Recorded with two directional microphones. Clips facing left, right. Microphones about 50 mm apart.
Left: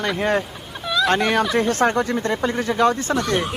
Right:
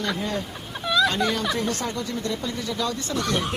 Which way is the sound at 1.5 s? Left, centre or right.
Left.